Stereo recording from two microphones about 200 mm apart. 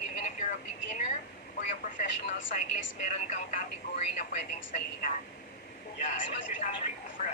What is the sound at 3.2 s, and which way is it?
Speech, 40° left (ahead or behind).